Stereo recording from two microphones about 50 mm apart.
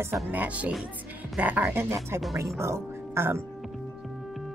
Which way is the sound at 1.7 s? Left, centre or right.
Right.